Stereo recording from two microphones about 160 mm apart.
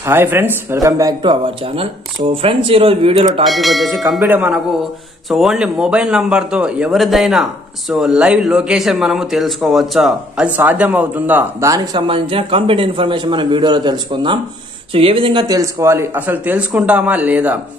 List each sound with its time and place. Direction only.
0.0 s speech: 15° right (ahead or behind); by 3.4 s 35° right (ahead or behind)
3.4 s a man's voice: centre (ahead or behind)